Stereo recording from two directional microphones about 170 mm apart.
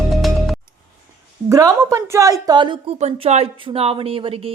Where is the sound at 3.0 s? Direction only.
40° right (ahead or behind).